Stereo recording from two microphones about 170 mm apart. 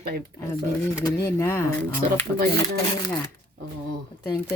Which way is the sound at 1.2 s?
15° left (ahead or behind).